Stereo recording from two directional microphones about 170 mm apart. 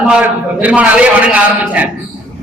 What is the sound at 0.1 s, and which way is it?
A man's voice, 5° right (ahead or behind).